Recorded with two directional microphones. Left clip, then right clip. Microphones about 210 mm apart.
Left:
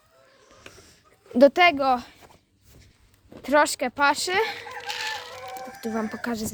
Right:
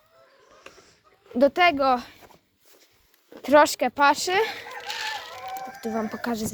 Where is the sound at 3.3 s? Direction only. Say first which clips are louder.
Right 3 dB; 15° right (ahead or behind).